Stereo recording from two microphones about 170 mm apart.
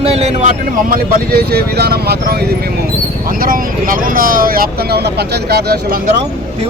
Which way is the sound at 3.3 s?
55° right (ahead or behind).